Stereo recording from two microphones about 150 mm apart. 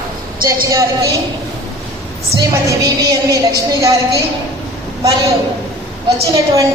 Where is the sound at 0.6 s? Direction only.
20° right (ahead or behind).